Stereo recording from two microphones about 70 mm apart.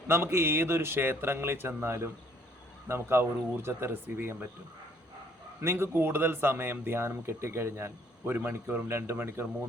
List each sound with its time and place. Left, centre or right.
0.1 s a man's voice: right
5.5 s a man's voice: right